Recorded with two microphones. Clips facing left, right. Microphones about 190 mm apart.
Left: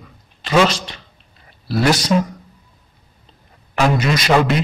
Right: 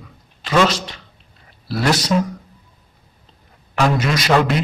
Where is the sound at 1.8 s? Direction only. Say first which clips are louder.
Left 2 dB; 5° left (ahead or behind).